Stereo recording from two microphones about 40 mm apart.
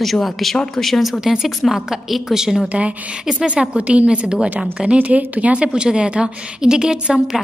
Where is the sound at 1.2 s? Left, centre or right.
Centre.